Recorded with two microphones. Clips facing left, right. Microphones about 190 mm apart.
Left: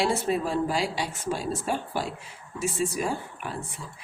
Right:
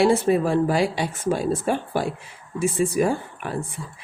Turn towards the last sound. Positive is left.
turn(degrees=-55)  # may be behind; listen again after turning